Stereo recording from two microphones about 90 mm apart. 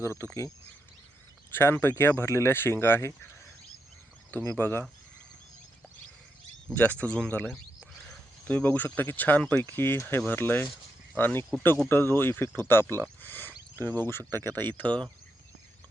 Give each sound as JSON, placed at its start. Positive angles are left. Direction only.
{"t": 0.0, "sound": "speech", "side_deg": 30}
{"t": 1.5, "sound": "speech", "side_deg": 25}
{"t": 4.4, "sound": "speech", "side_deg": 25}
{"t": 6.7, "sound": "speech", "side_deg": 15}
{"t": 13.2, "sound": "a sound", "side_deg": 25}
{"t": 13.7, "sound": "speech", "side_deg": 20}